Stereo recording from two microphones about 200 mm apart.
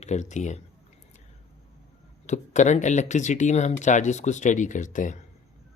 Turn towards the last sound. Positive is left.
turn(degrees=40)  # may be behind; listen again after turning